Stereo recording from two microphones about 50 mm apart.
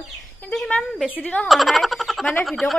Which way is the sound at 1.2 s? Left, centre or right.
Left.